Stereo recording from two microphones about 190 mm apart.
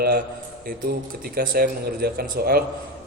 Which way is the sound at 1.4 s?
55° right (ahead or behind).